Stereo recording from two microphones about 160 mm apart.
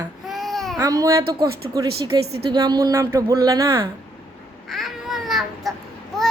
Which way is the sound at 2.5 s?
25° right (ahead or behind).